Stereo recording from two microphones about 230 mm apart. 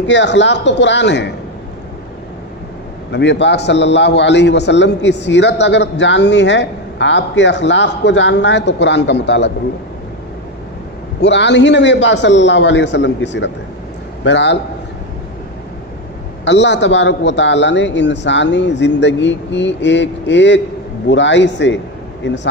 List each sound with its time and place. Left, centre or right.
0.0 s a man's voice: left
3.1 s a man's voice: left
11.1 s a man's voice: left
16.4 s a man's voice: left